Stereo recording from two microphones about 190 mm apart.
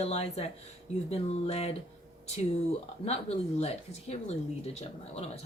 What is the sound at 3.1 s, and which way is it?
A woman's voice, 35° left (ahead or behind).